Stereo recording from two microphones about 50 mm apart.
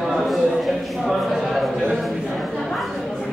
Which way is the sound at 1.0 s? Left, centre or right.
Centre.